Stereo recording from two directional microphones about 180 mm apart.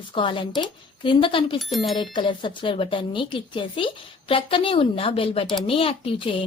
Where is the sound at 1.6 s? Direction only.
Centre (ahead or behind).